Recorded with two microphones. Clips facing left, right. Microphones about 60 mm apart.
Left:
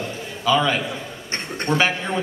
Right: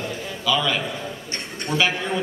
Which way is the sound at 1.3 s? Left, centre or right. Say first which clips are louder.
Left 6 dB; left.